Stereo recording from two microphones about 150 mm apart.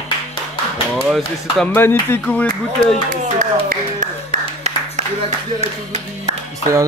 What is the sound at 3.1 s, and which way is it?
Clapping, 65° right (ahead or behind).